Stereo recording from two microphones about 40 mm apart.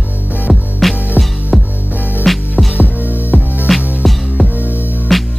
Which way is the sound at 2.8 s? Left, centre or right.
Right.